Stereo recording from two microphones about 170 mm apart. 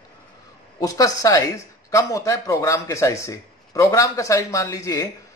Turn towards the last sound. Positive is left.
turn(degrees=20)  # may be behind; listen again after turning